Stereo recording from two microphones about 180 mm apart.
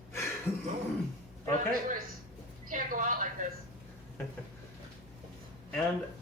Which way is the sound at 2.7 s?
45° right (ahead or behind).